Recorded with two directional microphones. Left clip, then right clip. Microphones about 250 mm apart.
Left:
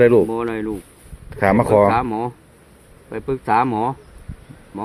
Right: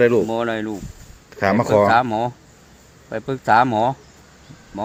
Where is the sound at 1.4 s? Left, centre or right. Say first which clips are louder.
Left 2 dB; centre.